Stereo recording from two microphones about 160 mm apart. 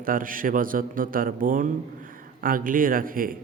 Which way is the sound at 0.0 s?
60° right (ahead or behind).